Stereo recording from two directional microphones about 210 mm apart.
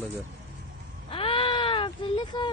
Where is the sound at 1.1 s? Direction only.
25° left (ahead or behind).